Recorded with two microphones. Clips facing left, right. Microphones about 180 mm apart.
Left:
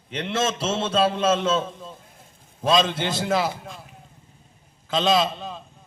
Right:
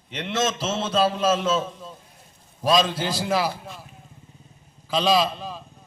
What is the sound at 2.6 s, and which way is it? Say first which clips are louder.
Speech: even; 5° right (ahead or behind).